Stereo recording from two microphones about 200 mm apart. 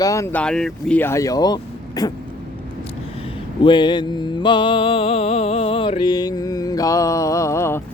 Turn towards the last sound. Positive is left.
turn(degrees=15)  # may be behind; listen again after turning